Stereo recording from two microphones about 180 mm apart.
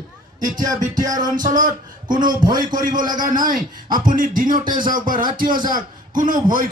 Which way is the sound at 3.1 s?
50° right (ahead or behind).